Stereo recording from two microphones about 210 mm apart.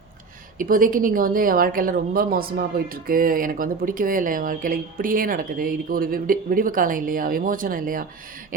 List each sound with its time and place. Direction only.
0.6 s a woman's voice: 40° right (ahead or behind)